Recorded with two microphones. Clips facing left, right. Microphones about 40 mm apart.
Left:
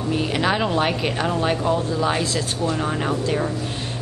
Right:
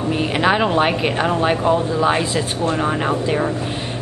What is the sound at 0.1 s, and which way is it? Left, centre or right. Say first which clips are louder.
A woman's voice: right 4 dB; centre.